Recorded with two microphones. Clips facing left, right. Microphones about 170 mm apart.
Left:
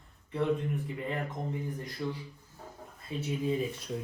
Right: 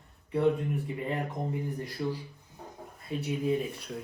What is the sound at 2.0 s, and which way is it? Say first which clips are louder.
Speech: right 3 dB; 30° right (ahead or behind).